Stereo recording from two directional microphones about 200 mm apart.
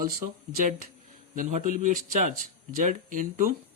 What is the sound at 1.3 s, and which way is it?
Speech, 40° right (ahead or behind).